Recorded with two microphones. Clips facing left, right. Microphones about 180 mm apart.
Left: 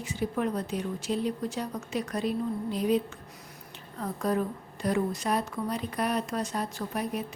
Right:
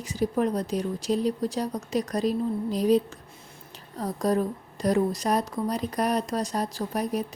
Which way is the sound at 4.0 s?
35° right (ahead or behind).